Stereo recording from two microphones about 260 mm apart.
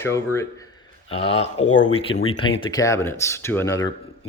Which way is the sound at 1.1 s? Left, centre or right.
Left.